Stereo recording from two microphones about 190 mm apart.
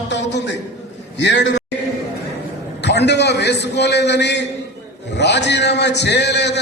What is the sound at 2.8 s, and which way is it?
A man's voice, 65° left (ahead or behind).